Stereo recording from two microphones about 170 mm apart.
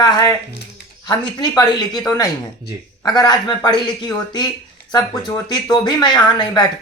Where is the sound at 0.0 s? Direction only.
25° left (ahead or behind).